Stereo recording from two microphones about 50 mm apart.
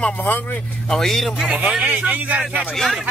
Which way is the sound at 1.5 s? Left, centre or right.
Right.